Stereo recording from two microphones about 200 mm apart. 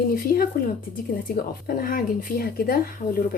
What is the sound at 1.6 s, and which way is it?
Speech, 45° left (ahead or behind).